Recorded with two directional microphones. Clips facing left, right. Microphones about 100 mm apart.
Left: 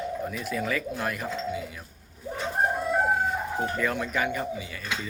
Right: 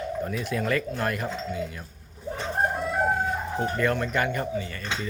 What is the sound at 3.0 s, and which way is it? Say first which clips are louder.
Chicken: even; 5° left (ahead or behind).